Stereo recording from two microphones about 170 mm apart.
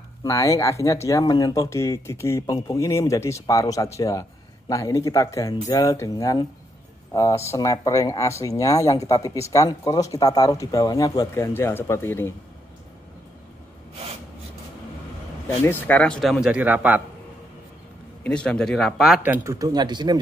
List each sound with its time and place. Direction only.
0.2 s speech: 20° left (ahead or behind)
15.6 s speech: 10° left (ahead or behind); by 17.0 s 10° right (ahead or behind)
18.2 s speech: 5° left (ahead or behind); by 20.2 s 25° right (ahead or behind)